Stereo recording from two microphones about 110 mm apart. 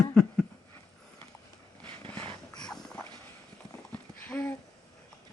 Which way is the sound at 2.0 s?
15° left (ahead or behind).